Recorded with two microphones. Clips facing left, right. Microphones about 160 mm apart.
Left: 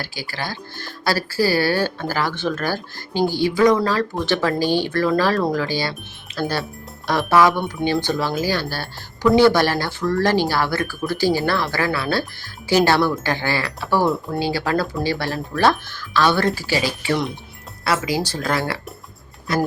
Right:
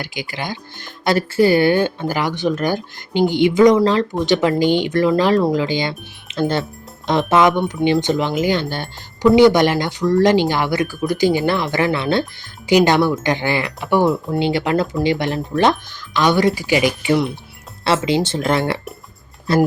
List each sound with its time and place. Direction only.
0.0 s speech: 15° right (ahead or behind)